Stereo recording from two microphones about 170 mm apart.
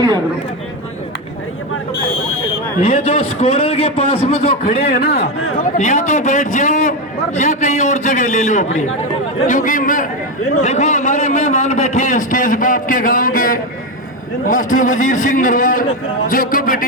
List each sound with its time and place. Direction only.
2.8 s a man's voice: 40° left (ahead or behind)
4.6 s a man's voice: 60° left (ahead or behind)
5.1 s a man's voice: 45° left (ahead or behind)